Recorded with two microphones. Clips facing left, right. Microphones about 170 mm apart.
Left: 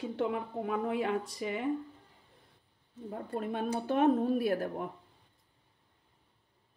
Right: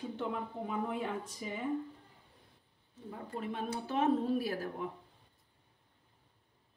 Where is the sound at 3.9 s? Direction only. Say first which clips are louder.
Left 4 dB; 60° left (ahead or behind).